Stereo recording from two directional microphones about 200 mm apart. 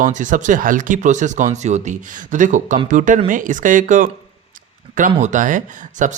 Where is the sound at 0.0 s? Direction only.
40° right (ahead or behind).